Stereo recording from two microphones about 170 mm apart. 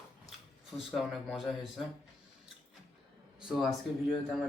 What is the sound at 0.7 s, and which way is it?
Speech, centre (ahead or behind).